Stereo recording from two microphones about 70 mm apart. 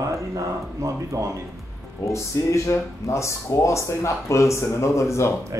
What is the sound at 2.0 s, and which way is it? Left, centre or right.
Speech, left.